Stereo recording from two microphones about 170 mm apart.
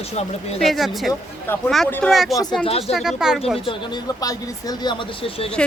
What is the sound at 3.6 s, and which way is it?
Speech, 25° left (ahead or behind).